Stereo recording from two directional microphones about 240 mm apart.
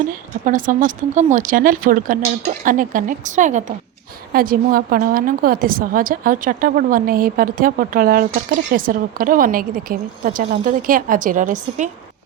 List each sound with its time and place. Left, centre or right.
0.4 s a woman's voice: right